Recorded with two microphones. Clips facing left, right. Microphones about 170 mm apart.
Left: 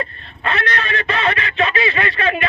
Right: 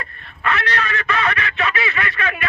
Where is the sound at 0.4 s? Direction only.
25° left (ahead or behind).